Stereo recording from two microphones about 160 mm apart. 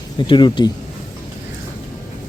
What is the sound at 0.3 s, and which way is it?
Speech, 30° left (ahead or behind).